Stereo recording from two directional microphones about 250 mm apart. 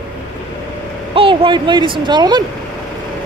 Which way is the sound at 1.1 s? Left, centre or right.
Right.